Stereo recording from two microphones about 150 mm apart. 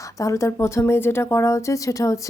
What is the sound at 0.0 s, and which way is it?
Speech, 20° left (ahead or behind).